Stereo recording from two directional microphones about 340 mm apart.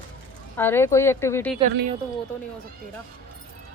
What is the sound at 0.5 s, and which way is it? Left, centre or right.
Speech, centre.